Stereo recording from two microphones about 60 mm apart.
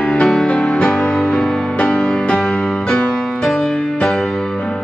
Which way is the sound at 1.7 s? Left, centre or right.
Centre.